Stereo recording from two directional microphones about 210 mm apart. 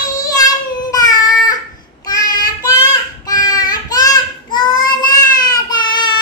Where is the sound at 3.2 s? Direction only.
15° left (ahead or behind).